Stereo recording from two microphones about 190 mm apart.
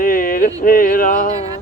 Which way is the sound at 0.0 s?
45° left (ahead or behind).